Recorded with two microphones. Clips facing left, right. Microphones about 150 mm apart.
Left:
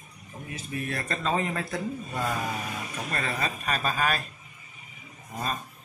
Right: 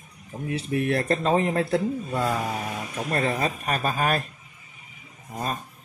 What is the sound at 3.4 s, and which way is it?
Speech, 50° right (ahead or behind).